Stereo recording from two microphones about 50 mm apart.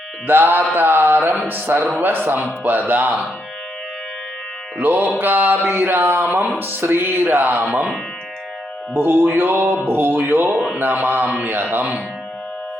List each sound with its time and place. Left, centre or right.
0.3 s mantra: right
0.7 s speech: right
4.8 s mantra: right
6.2 s speech: right
8.9 s mantra: right
11.0 s speech: right
11.3 s mantra: right
11.7 s speech: right